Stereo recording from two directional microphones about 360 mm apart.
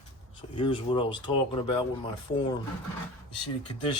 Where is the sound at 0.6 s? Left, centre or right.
Centre.